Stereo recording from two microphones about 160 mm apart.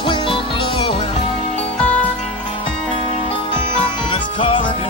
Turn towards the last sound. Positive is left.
turn(degrees=30)  # may be behind; listen again after turning